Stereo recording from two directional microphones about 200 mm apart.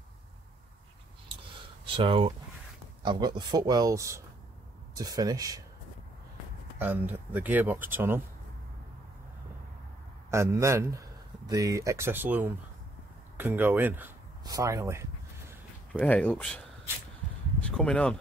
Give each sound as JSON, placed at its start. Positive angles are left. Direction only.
{"t": 2.0, "sound": "speech", "side_deg": -25}
{"t": 6.8, "sound": "speech", "side_deg": -10}
{"t": 10.3, "sound": "a man's voice", "side_deg": -15}
{"t": 14.4, "sound": "a sound", "side_deg": -15}
{"t": 15.9, "sound": "speech", "side_deg": 5}
{"t": 17.6, "sound": "a sound", "side_deg": 5}